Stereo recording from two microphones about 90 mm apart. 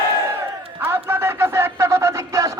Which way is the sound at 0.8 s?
25° right (ahead or behind).